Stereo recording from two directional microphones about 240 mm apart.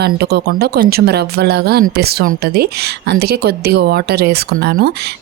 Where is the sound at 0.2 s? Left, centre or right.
Right.